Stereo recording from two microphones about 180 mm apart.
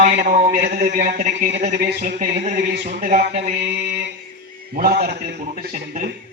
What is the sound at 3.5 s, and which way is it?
A man's voice, 65° right (ahead or behind).